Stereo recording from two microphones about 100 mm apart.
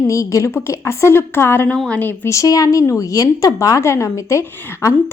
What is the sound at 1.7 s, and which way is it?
Speech, 10° left (ahead or behind).